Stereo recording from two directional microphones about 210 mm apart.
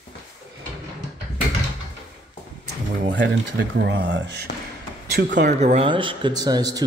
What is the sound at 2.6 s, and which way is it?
Speech, 55° right (ahead or behind).